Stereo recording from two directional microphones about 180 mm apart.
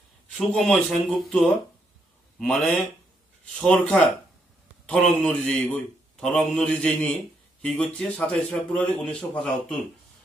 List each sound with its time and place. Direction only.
0.3 s a man's voice: 5° left (ahead or behind)